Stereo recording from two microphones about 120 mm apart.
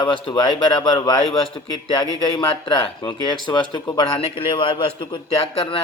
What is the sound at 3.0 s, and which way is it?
Speech, 40° left (ahead or behind).